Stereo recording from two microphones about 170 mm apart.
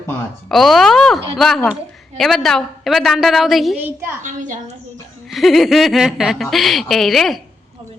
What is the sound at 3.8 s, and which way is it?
Speech, 10° right (ahead or behind).